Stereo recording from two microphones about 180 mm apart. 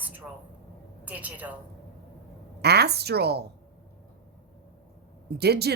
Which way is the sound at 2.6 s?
65° right (ahead or behind).